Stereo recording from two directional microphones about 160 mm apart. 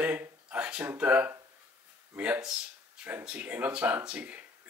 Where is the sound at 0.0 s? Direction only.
10° right (ahead or behind).